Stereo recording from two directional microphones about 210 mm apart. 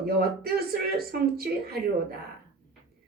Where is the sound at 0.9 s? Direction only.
45° right (ahead or behind).